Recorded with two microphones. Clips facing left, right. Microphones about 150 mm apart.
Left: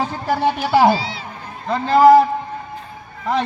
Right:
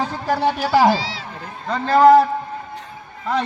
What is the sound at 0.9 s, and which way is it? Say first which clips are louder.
Speech: even; 90° right.